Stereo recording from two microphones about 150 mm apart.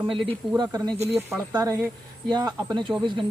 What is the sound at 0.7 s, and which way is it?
Speech, 20° right (ahead or behind).